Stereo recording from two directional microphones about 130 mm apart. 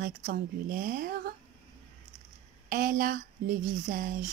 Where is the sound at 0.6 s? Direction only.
90° right.